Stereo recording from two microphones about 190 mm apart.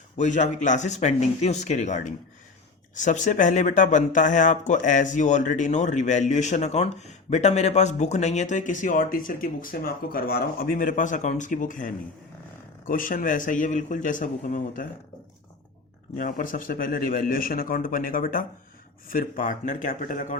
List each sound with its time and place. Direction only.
0.2 s a man's voice: 40° left (ahead or behind)
16.1 s a man's voice: 45° left (ahead or behind)